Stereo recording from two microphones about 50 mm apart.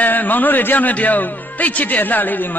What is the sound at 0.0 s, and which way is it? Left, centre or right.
A man's voice, left.